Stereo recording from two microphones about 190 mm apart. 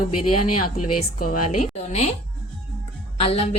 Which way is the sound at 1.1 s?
45° left (ahead or behind).